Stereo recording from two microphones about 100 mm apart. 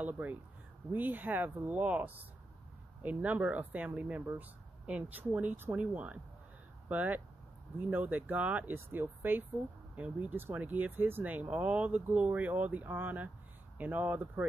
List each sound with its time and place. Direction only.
0.0 s speech: 15° right (ahead or behind)